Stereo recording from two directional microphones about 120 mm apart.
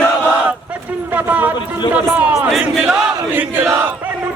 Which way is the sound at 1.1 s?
15° right (ahead or behind).